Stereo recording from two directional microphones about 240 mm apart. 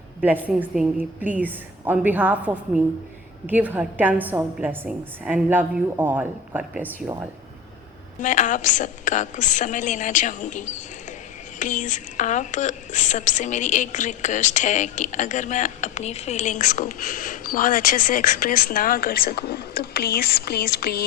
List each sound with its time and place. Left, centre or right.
0.2 s a woman's voice: centre
8.2 s a woman's voice: left